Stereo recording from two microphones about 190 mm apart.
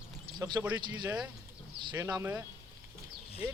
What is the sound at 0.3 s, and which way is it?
Speech, 20° right (ahead or behind).